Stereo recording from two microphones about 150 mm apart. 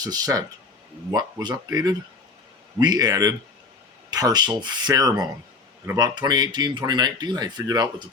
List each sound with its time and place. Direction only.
0.0 s speech: 25° right (ahead or behind)